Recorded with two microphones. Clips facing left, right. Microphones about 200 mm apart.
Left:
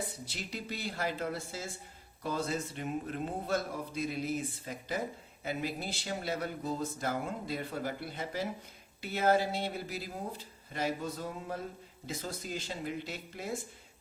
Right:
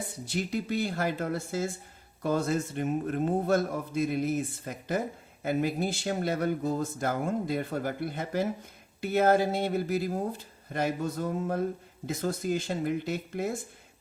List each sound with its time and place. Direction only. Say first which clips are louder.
0.3 s a man's voice: right 10 dB; 50° right (ahead or behind)